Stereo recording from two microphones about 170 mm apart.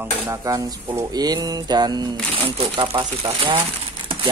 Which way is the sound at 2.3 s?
30° right (ahead or behind).